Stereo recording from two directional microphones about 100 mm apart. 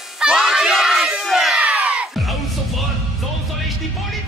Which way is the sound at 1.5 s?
15° right (ahead or behind).